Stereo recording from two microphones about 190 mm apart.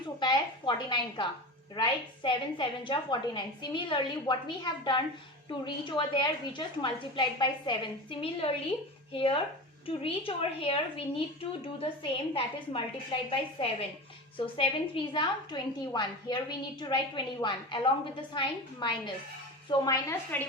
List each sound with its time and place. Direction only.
0.2 s a woman's voice: 25° left (ahead or behind)